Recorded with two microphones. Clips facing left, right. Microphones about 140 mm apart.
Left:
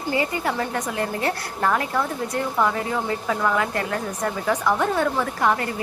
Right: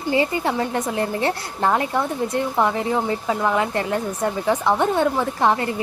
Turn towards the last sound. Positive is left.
turn(degrees=-25)  # may be behind; listen again after turning